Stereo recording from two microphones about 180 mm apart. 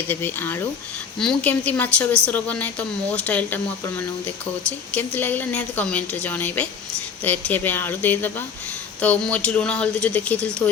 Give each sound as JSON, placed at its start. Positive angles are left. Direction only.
{"t": 0.1, "sound": "a woman's voice", "side_deg": 10}